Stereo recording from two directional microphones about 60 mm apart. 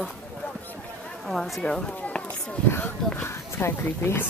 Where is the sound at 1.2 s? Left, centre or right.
Centre.